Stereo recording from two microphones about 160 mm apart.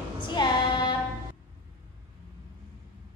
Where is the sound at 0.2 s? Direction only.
30° left (ahead or behind).